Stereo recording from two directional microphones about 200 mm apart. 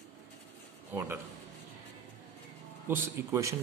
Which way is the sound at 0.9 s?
10° right (ahead or behind).